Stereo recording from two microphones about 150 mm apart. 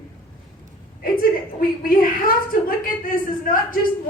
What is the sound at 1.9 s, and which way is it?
Speech, 75° left (ahead or behind).